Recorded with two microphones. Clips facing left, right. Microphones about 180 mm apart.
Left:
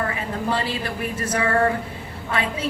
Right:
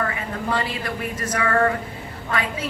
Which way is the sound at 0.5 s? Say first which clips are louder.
Even; 30° left (ahead or behind).